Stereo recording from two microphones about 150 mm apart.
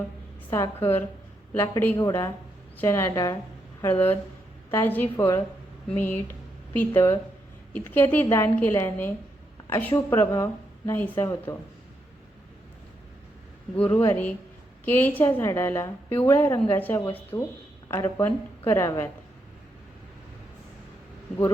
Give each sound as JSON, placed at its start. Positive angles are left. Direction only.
{"t": 0.5, "sound": "a woman's voice", "side_deg": 20}
{"t": 14.0, "sound": "a woman's voice", "side_deg": 15}